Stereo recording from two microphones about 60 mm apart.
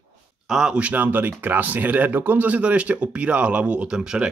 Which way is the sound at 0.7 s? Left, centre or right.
Right.